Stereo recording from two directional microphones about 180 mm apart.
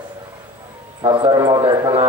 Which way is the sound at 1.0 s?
25° right (ahead or behind).